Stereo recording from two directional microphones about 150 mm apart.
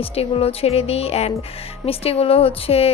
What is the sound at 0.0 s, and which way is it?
A woman's voice, 40° left (ahead or behind).